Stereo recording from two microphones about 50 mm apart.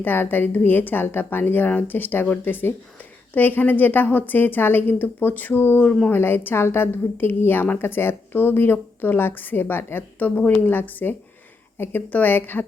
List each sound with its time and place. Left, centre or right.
0.0 s a woman's voice: left